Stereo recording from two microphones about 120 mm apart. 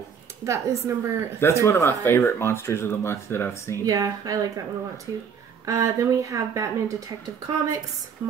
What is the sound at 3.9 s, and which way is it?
Speech, 30° right (ahead or behind).